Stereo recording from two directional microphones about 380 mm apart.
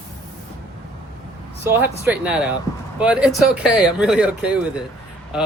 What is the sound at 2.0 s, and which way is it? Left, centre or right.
Speech, centre.